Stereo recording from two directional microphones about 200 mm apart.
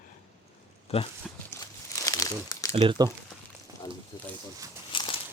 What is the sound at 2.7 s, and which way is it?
Speech, 25° right (ahead or behind).